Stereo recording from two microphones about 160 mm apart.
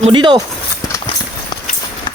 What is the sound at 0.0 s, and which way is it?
Speech, 30° right (ahead or behind).